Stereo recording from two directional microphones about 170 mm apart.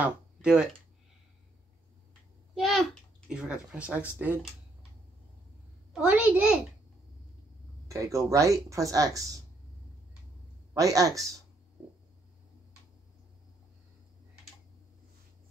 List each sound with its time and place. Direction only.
0.0 s speech: 5° right (ahead or behind)
2.5 s a child's voice: centre (ahead or behind)
5.9 s a child's voice: 10° right (ahead or behind)
7.9 s speech: 20° right (ahead or behind)
10.7 s speech: 20° right (ahead or behind)